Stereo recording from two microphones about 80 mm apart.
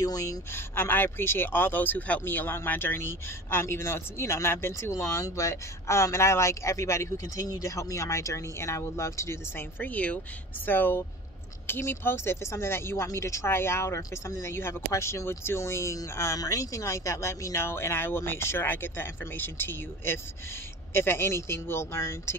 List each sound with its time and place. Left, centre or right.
0.0 s speech: left
0.5 s speech: left